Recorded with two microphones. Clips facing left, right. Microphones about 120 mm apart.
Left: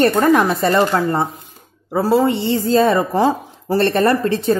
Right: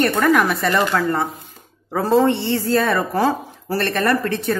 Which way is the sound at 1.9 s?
10° left (ahead or behind).